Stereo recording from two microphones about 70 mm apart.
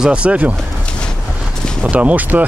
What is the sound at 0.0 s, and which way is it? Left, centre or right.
Speech, centre.